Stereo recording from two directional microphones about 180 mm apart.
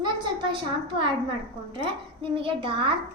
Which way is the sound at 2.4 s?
30° right (ahead or behind).